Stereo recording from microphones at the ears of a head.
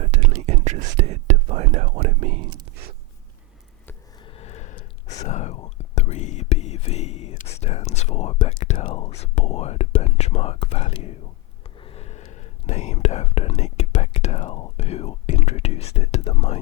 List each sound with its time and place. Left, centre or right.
0.0 s whispering: right
4.4 s whispering: left